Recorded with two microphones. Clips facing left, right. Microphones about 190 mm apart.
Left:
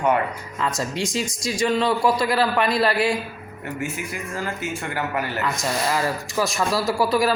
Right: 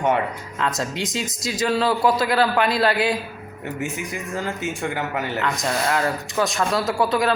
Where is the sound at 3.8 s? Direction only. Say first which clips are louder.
Right 1 dB; 20° right (ahead or behind).